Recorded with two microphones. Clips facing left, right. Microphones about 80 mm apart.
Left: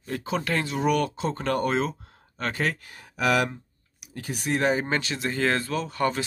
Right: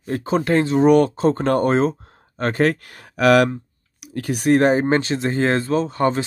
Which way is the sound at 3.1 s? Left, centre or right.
Right.